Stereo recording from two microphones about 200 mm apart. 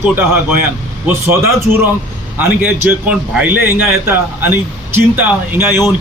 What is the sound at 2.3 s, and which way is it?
A man's voice, 10° right (ahead or behind).